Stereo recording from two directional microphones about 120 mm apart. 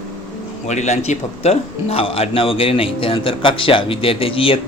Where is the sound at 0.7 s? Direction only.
75° left (ahead or behind).